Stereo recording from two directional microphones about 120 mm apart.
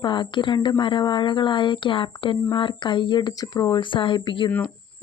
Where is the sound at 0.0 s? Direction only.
40° left (ahead or behind).